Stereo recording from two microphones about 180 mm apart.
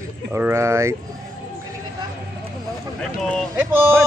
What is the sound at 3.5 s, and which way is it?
Speech, 10° right (ahead or behind).